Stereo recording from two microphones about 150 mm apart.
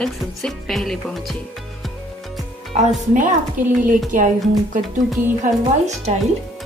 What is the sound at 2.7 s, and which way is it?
Speech, 40° right (ahead or behind).